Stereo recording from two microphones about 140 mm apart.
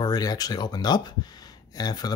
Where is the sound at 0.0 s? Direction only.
30° left (ahead or behind).